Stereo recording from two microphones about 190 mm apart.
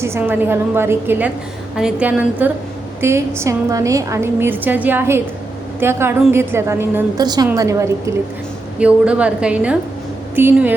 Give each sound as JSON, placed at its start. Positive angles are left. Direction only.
{"t": 0.0, "sound": "a woman's voice", "side_deg": -10}